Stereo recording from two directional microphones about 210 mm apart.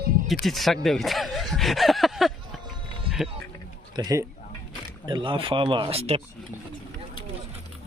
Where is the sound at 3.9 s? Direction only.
15° right (ahead or behind).